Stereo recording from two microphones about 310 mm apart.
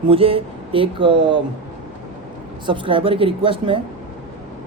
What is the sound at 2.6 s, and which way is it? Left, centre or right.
Speech, centre.